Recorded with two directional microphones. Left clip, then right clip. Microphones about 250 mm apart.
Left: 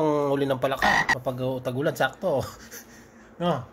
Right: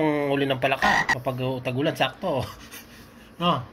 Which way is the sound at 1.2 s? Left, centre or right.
Centre.